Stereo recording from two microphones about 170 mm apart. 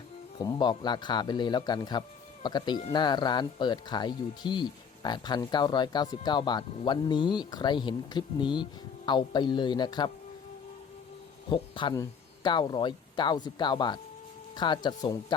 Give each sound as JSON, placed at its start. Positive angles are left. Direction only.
{"t": 0.3, "sound": "speech", "side_deg": 25}
{"t": 11.4, "sound": "speech", "side_deg": 30}